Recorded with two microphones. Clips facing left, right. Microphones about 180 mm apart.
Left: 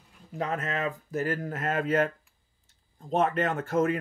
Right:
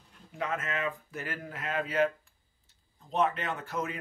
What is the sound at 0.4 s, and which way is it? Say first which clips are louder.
Speech: left 3 dB; 35° left (ahead or behind).